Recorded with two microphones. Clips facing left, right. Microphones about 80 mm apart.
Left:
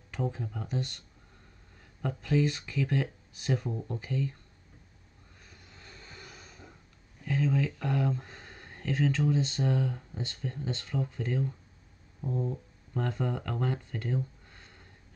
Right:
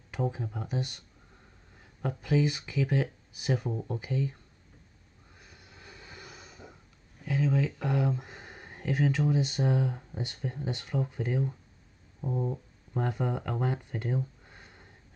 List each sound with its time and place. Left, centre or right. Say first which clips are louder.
0.1 s speech: right 2 dB; centre
5.4 s vehicle: right 1 dB; centre
7.2 s speech: right 1 dB; centre